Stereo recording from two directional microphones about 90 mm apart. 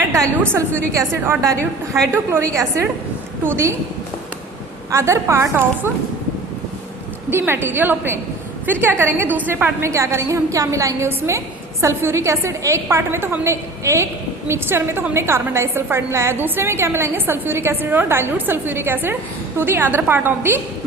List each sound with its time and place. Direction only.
0.1 s a woman's voice: 35° right (ahead or behind)
4.9 s a woman's voice: 30° right (ahead or behind)
7.3 s a woman's voice: 25° right (ahead or behind)